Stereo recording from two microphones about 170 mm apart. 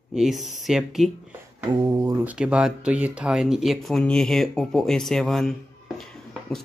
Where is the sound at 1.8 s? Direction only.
20° right (ahead or behind).